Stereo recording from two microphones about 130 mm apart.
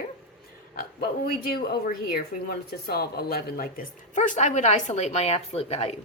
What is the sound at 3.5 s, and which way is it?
Speech, 85° left.